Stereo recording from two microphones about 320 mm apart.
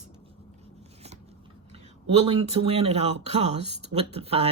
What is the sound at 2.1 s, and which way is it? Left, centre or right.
Speech, centre.